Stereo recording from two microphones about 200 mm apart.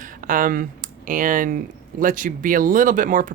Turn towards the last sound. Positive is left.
turn(degrees=-40)  # may be behind; listen again after turning